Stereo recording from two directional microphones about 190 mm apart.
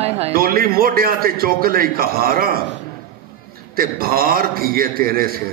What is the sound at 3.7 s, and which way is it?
A man's voice, 50° right (ahead or behind).